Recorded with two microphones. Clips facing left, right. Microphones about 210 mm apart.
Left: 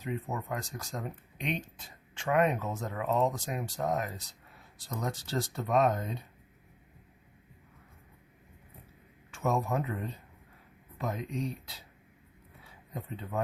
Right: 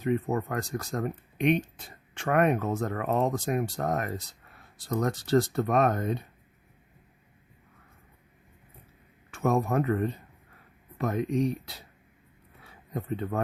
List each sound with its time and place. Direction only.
0.0 s speech: 60° right (ahead or behind)
9.3 s speech: 55° right (ahead or behind)
12.6 s a sound: 65° right (ahead or behind)